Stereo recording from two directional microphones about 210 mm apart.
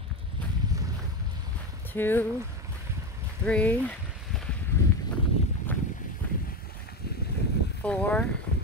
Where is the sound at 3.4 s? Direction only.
5° left (ahead or behind).